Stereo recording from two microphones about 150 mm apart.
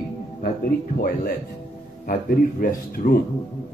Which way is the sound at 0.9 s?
75° left (ahead or behind).